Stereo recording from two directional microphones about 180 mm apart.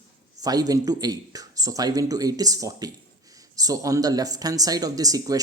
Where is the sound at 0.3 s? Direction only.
20° right (ahead or behind).